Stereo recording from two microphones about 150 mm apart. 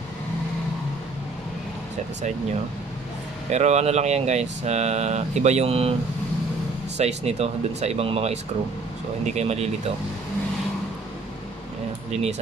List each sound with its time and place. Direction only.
3.4 s speech: 50° right (ahead or behind)
7.0 s speech: 45° right (ahead or behind)
12.1 s speech: 45° right (ahead or behind)